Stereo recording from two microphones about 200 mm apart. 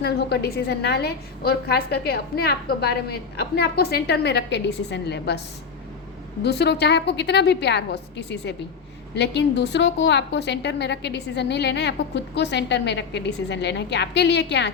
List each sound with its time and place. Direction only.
0.0 s a woman's voice: 55° left (ahead or behind)
6.4 s a woman's voice: 55° left (ahead or behind)